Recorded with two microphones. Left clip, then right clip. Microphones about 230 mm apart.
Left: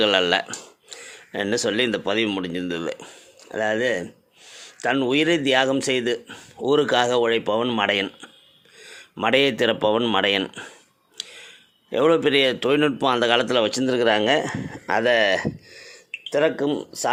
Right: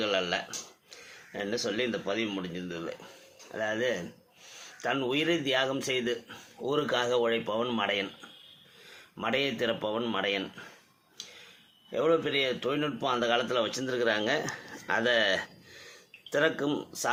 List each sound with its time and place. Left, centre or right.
0.0 s a man's voice: left
11.2 s tick-tock: left
11.9 s a man's voice: left; by 16.8 s centre